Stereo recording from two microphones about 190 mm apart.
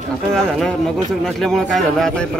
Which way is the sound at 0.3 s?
5° left (ahead or behind).